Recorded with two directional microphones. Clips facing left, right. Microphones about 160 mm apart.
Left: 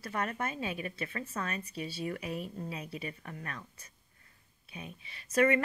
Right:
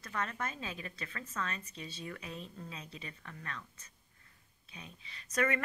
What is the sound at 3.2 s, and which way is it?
Speech, 35° left (ahead or behind).